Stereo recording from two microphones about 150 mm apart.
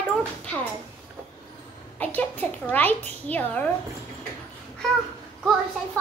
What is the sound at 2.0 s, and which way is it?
A child's voice, 10° left (ahead or behind).